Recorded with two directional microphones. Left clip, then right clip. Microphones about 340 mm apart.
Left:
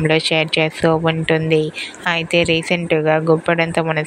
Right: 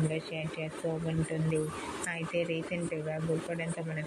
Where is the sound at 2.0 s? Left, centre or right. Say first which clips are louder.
Left 18 dB; left.